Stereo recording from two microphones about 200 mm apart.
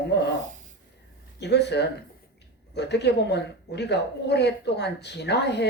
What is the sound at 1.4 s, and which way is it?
A woman's voice, 60° left (ahead or behind).